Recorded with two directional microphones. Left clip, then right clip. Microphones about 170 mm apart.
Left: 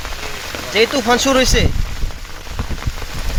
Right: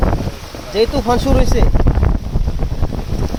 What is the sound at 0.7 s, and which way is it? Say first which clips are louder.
Speech: left 1 dB; 30° right (ahead or behind).